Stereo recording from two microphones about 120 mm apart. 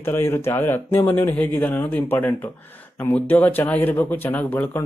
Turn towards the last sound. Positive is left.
turn(degrees=15)  # may be behind; listen again after turning